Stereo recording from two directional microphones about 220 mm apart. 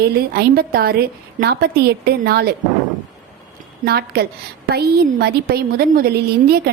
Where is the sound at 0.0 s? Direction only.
45° right (ahead or behind).